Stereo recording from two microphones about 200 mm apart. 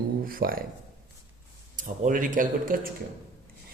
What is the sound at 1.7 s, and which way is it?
A man's voice, 40° right (ahead or behind).